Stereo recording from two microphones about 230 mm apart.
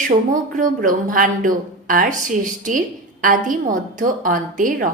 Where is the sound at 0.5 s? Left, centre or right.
Right.